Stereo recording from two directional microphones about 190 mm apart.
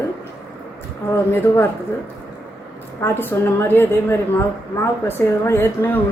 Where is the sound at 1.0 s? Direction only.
10° left (ahead or behind).